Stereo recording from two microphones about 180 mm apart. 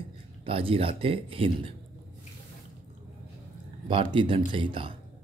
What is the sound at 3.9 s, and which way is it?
Speech, 30° right (ahead or behind).